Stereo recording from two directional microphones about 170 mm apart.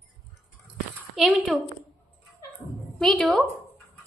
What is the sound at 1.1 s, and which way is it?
Speech, centre (ahead or behind).